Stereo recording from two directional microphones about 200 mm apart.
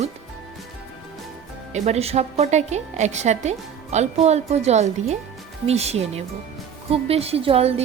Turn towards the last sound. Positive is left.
turn(degrees=-30)  # may be behind; listen again after turning